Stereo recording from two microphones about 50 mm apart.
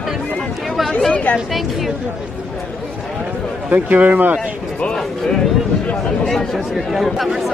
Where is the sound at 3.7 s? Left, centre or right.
Right.